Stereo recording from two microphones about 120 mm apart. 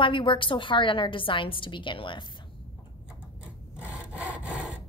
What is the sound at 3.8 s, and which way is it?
Sawing, 10° right (ahead or behind).